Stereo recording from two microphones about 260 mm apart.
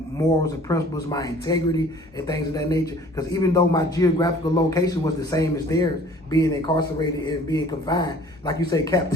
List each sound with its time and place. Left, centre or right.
0.4 s a man's voice: centre